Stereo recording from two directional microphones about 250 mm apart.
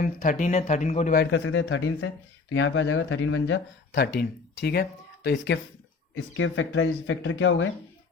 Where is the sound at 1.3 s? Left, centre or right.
Left.